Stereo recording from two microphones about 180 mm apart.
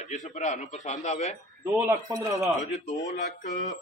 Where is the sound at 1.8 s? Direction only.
20° right (ahead or behind).